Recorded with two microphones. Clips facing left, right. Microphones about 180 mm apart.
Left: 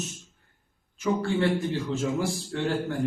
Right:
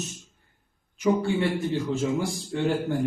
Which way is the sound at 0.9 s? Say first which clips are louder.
Right 3 dB; 15° right (ahead or behind).